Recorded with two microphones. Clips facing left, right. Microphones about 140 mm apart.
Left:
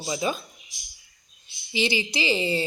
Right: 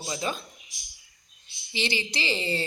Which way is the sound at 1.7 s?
10° left (ahead or behind).